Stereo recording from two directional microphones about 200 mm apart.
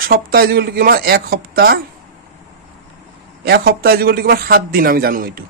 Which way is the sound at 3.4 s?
50° right (ahead or behind).